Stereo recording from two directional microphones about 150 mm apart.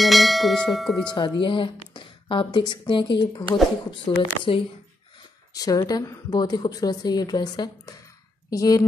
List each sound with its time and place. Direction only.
0.0 s church bell: centre (ahead or behind)
1.1 s a woman's voice: 30° left (ahead or behind)